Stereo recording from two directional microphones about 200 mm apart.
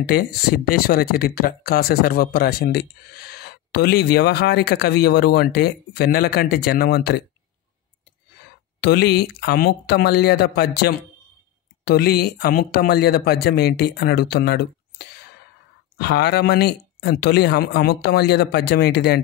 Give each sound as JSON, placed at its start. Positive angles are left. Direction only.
{"t": 0.7, "sound": "speech", "side_deg": 50}
{"t": 8.8, "sound": "speech", "side_deg": 55}